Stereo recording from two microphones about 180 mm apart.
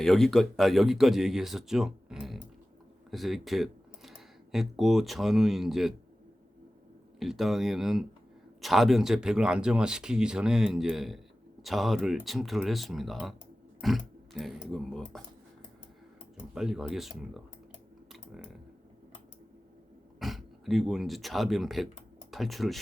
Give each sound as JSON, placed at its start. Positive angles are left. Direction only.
{"t": 0.0, "sound": "speech", "side_deg": 0}
{"t": 7.2, "sound": "speech", "side_deg": 0}
{"t": 16.6, "sound": "speech", "side_deg": 0}
{"t": 18.1, "sound": "typing", "side_deg": 0}
{"t": 20.1, "sound": "speech", "side_deg": 0}